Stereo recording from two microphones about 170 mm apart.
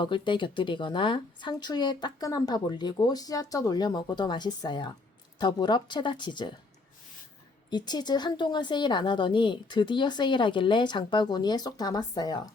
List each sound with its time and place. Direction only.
0.0 s speech: 30° left (ahead or behind)
7.7 s speech: 25° left (ahead or behind)